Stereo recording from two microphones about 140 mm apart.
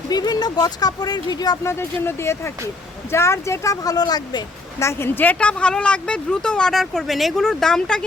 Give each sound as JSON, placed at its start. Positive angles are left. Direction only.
{"t": 0.1, "sound": "speech", "side_deg": 30}
{"t": 4.8, "sound": "speech", "side_deg": 20}